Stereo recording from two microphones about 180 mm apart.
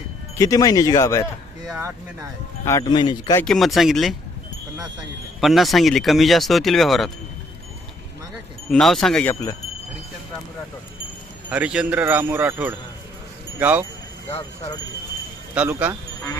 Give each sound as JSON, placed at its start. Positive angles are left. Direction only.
{"t": 0.3, "sound": "speech", "side_deg": 20}
{"t": 2.6, "sound": "speech", "side_deg": 20}
{"t": 3.4, "sound": "speech", "side_deg": 0}
{"t": 5.4, "sound": "speech", "side_deg": 0}
{"t": 8.7, "sound": "speech", "side_deg": 5}
{"t": 9.3, "sound": "speech", "side_deg": 15}
{"t": 11.4, "sound": "speech", "side_deg": -5}
{"t": 15.5, "sound": "speech", "side_deg": -10}